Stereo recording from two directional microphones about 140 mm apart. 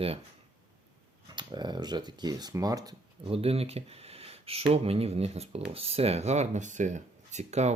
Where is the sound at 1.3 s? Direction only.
30° right (ahead or behind).